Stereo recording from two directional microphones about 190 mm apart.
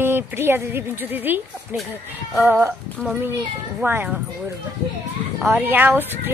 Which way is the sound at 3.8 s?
5° right (ahead or behind).